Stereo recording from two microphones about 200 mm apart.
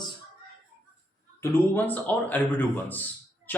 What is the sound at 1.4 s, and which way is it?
Speech, 10° left (ahead or behind).